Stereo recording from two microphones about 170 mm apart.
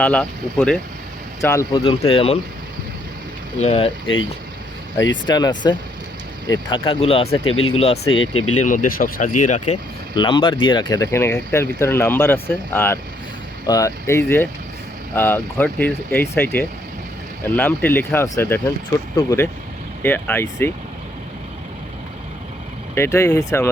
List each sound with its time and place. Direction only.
0.0 s speech: 5° left (ahead or behind)
1.8 s speech: 35° left (ahead or behind)
3.6 s speech: 35° left (ahead or behind)
4.9 s speech: 90° left
5.3 s speech: 25° left (ahead or behind)
8.6 s speech: 50° left (ahead or behind)
10.2 s speech: 30° left (ahead or behind)
23.0 s speech: 15° left (ahead or behind)